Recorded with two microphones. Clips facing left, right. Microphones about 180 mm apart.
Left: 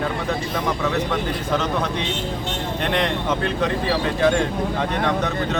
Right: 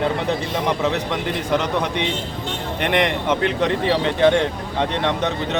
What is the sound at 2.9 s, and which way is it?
Speech, 15° right (ahead or behind).